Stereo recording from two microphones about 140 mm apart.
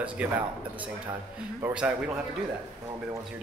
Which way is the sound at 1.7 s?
5° right (ahead or behind).